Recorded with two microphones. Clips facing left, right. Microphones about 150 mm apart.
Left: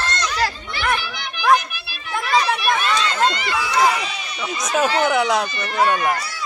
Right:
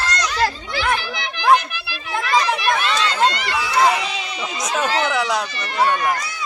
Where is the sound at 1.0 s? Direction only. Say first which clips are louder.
Right 2 dB; 90° right.